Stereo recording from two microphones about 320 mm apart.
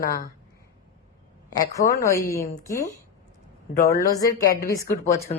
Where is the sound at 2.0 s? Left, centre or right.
Centre.